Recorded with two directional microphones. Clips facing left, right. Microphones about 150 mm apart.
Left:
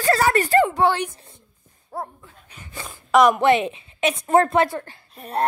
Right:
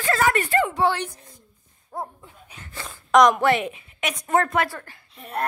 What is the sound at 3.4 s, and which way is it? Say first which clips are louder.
Speech: left 3 dB; 25° left (ahead or behind).